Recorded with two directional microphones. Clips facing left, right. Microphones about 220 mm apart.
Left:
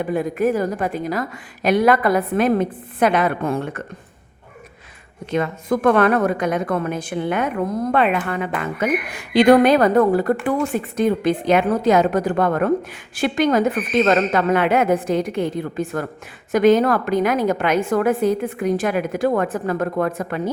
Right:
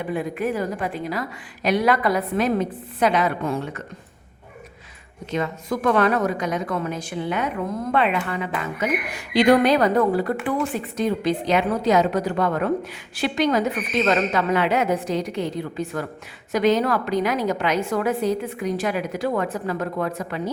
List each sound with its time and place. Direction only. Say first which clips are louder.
0.1 s a woman's voice: left 5 dB; 45° left (ahead or behind)
5.3 s a woman's voice: left 5 dB; 55° left (ahead or behind)